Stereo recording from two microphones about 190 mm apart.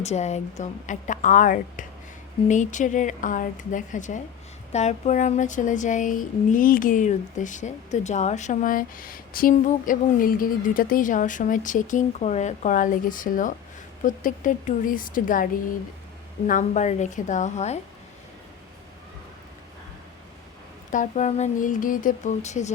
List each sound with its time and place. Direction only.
0.0 s speech: 35° left (ahead or behind)
16.5 s speech: 40° left (ahead or behind)
20.9 s speech: 40° left (ahead or behind)